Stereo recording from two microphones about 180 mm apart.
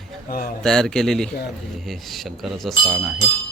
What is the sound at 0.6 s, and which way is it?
Speech, 5° left (ahead or behind).